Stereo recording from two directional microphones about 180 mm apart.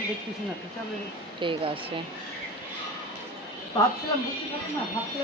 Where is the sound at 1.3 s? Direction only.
30° right (ahead or behind).